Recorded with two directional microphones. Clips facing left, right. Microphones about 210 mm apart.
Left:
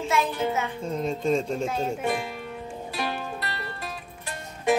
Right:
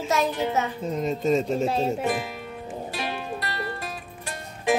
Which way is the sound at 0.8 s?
5° right (ahead or behind).